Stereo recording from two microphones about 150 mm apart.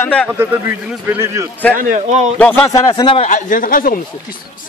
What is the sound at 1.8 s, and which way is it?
Speech, 60° right (ahead or behind).